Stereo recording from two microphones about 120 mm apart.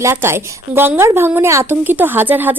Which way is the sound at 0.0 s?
20° right (ahead or behind).